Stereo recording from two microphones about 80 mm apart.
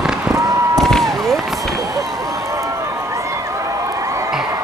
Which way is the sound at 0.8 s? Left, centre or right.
Centre.